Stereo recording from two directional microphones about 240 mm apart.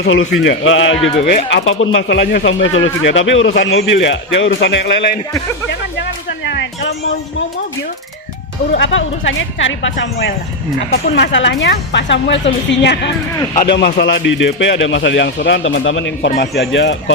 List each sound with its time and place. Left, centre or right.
0.0 s speech: left
6.0 s speech: left
8.7 s speech: left